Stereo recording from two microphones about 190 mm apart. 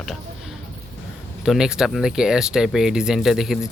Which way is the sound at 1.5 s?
5° right (ahead or behind).